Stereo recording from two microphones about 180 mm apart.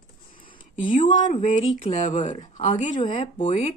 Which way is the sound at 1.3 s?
40° left (ahead or behind).